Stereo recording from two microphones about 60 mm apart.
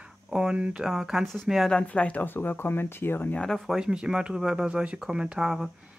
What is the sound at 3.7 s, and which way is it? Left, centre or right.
Speech, centre.